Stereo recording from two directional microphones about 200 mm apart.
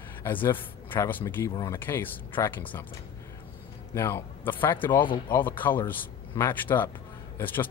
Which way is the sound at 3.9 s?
15° left (ahead or behind).